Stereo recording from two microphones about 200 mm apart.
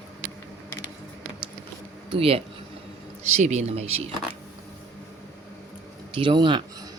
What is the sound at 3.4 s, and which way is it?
Speech, 35° right (ahead or behind).